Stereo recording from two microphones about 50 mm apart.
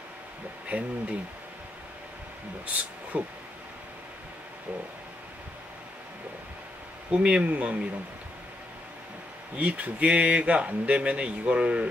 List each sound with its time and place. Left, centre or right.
0.7 s speech: right
3.1 s speech: right
7.1 s speech: right
9.6 s speech: right